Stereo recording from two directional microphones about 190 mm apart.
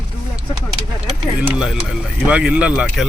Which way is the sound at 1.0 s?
5° right (ahead or behind).